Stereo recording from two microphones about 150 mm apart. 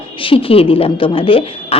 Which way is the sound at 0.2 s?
35° left (ahead or behind).